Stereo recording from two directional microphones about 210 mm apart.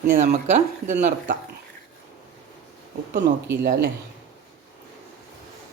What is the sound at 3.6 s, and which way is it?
Speech, 55° right (ahead or behind).